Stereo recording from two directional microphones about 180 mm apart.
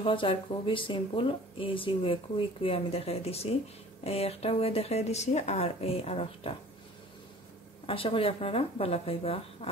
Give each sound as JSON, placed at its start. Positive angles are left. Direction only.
{"t": 0.0, "sound": "speech", "side_deg": 30}
{"t": 7.8, "sound": "speech", "side_deg": 30}